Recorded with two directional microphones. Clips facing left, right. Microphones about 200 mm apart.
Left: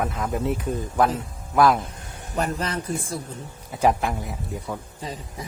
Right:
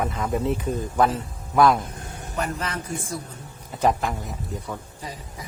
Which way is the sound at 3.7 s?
10° left (ahead or behind).